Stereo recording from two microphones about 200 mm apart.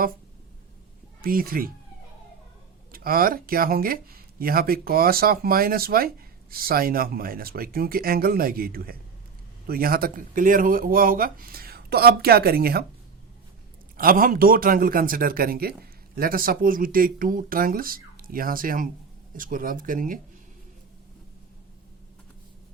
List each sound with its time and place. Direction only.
1.2 s speech: 45° right (ahead or behind)
2.9 s speech: 45° right (ahead or behind)
13.9 s speech: 45° right (ahead or behind)